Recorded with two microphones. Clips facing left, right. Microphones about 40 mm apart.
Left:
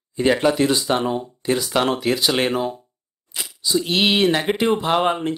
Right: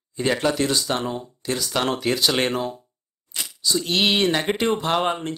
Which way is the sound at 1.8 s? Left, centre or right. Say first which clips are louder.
Left 2 dB; centre.